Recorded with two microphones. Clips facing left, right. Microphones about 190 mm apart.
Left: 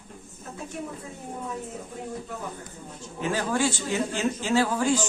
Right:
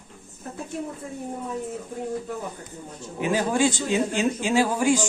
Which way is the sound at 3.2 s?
15° right (ahead or behind).